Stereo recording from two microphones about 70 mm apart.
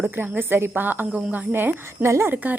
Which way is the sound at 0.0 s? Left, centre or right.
Right.